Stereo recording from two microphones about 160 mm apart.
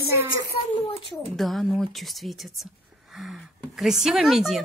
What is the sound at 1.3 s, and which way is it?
Speech, centre (ahead or behind).